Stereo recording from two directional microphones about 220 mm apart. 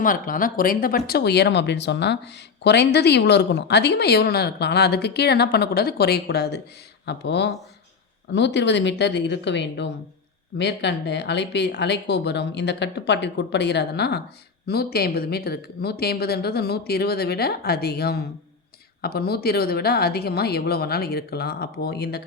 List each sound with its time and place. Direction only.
0.0 s speech: 40° left (ahead or behind)